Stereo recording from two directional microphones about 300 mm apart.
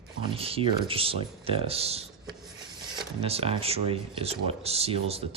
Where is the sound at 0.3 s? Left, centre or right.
Centre.